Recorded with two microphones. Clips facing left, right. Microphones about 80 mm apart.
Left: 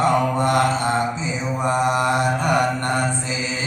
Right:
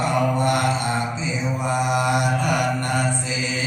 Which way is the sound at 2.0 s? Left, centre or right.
Left.